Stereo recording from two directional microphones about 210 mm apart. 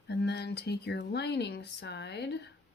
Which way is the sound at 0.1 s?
50° left (ahead or behind).